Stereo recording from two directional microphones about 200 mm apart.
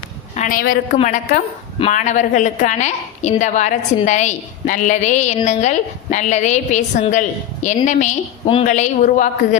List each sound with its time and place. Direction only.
0.3 s a woman's voice: 40° left (ahead or behind)